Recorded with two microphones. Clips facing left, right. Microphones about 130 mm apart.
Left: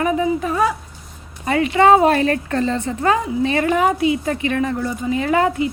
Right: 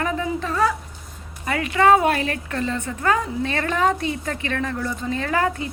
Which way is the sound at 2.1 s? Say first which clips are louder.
Left 7 dB; 40° left (ahead or behind).